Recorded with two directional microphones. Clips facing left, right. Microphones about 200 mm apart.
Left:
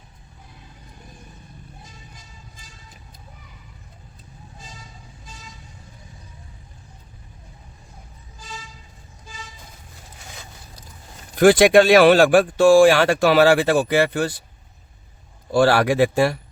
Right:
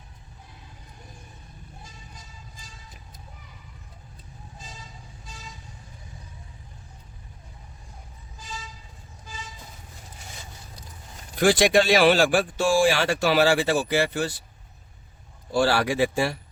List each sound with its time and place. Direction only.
11.3 s speech: 55° left (ahead or behind)
15.5 s speech: 60° left (ahead or behind)